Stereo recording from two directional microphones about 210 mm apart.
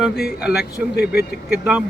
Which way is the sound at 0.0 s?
5° right (ahead or behind).